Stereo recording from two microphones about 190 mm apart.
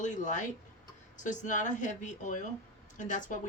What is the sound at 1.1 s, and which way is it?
Speech, 40° left (ahead or behind).